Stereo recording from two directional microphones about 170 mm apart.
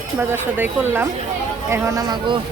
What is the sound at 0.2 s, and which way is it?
Speech, 15° right (ahead or behind).